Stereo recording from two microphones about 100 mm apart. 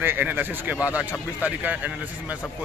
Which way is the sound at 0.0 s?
20° right (ahead or behind).